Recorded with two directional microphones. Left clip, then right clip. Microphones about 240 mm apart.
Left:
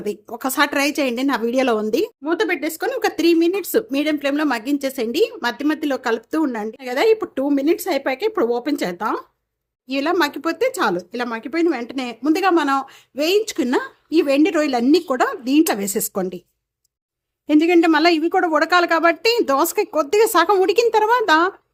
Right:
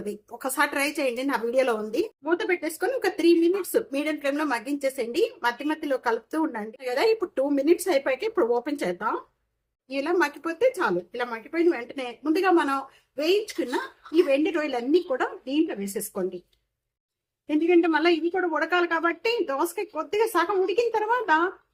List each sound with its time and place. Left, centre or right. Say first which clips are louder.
0.0 s a woman's voice: left 7 dB; left
17.5 s speech: left 7 dB; left